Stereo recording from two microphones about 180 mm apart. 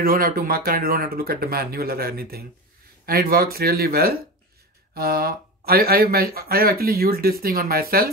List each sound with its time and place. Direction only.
0.0 s speech: 55° right (ahead or behind)